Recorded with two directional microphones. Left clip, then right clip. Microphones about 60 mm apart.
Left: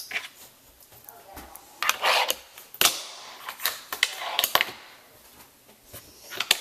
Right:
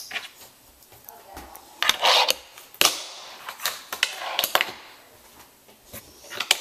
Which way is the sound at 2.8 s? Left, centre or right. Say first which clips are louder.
Right 2 dB; centre.